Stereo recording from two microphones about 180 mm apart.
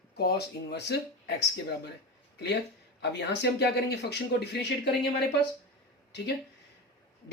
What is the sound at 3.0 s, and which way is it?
Speech, 70° left (ahead or behind).